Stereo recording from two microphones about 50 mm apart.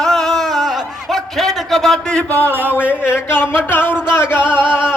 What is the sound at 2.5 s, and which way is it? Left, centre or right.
Speech, right.